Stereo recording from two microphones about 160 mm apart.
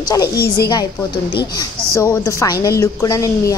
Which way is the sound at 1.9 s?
20° left (ahead or behind).